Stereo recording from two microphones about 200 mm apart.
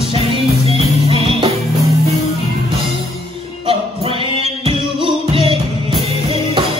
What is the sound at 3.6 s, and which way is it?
Music, 25° right (ahead or behind).